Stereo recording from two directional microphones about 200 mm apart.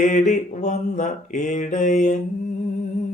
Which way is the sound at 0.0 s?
40° left (ahead or behind).